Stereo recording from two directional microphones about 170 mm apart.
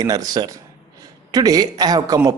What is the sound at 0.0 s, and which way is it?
A man's voice, 20° right (ahead or behind).